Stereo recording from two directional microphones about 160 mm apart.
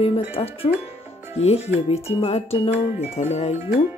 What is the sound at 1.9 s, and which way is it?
Music, 40° left (ahead or behind).